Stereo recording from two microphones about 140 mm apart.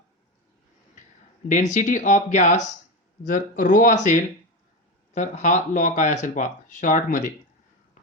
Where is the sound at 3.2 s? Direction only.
70° left (ahead or behind).